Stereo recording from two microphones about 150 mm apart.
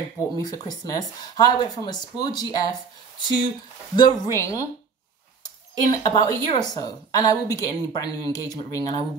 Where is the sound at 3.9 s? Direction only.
25° left (ahead or behind).